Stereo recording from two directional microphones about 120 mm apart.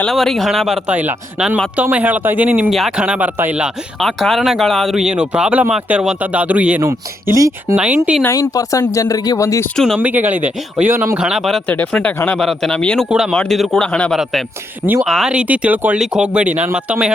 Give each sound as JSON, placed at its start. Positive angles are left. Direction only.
{"t": 0.0, "sound": "speech", "side_deg": 5}
{"t": 0.9, "sound": "speech", "side_deg": -10}
{"t": 2.6, "sound": "speech", "side_deg": 0}
{"t": 4.0, "sound": "speech", "side_deg": 0}
{"t": 8.2, "sound": "speech", "side_deg": 30}
{"t": 9.7, "sound": "speech", "side_deg": 5}
{"t": 10.0, "sound": "speech", "side_deg": -15}
{"t": 11.2, "sound": "speech", "side_deg": -5}
{"t": 11.7, "sound": "speech", "side_deg": 15}
{"t": 13.1, "sound": "speech", "side_deg": -5}
{"t": 15.0, "sound": "speech", "side_deg": 0}